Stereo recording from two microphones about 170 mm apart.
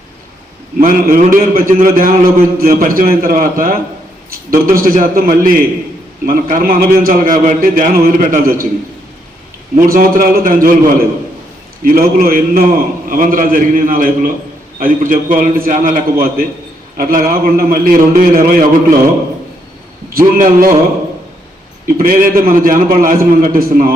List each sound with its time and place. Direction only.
0.8 s a man's voice: 55° right (ahead or behind)
9.7 s a man's voice: 55° right (ahead or behind)
20.1 s a man's voice: 55° right (ahead or behind)
21.8 s a man's voice: 55° right (ahead or behind)